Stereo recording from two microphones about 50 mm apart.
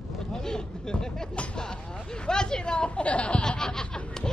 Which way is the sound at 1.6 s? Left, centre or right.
Centre.